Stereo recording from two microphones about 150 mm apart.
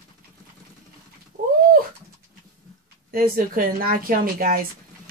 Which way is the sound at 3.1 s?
75° right (ahead or behind).